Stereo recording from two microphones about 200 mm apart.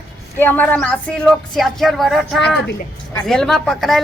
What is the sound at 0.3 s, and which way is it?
Speech, 10° left (ahead or behind).